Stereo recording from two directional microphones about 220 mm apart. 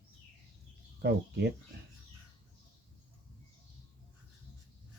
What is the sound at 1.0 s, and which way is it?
Speech, 50° right (ahead or behind).